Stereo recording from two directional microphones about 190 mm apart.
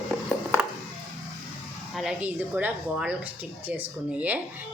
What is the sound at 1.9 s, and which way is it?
A woman's voice, 5° right (ahead or behind).